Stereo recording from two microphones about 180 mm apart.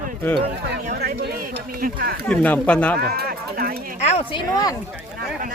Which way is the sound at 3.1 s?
55° right (ahead or behind).